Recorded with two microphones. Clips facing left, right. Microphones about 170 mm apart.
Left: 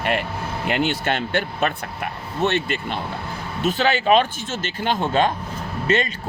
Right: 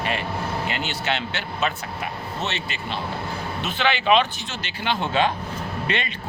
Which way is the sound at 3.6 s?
40° left (ahead or behind).